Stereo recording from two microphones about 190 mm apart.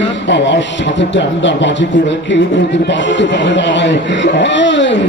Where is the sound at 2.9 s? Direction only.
70° left (ahead or behind).